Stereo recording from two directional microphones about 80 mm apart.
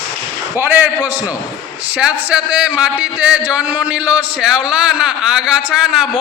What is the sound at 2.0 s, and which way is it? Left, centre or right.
A man's voice, centre.